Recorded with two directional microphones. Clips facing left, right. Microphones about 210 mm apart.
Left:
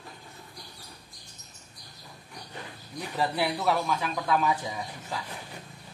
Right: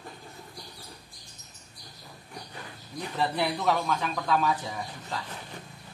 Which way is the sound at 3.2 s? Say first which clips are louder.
Even; 5° left (ahead or behind).